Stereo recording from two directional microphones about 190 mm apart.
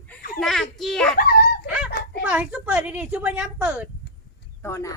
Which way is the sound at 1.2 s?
55° left (ahead or behind).